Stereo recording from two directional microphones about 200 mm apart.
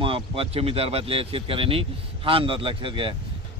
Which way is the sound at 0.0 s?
25° right (ahead or behind).